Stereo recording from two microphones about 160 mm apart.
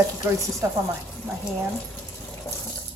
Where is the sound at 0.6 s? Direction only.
15° right (ahead or behind).